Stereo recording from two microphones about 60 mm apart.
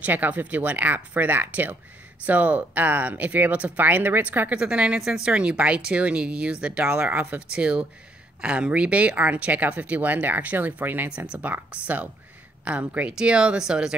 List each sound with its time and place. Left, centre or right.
0.0 s speech: right
7.5 s speech: centre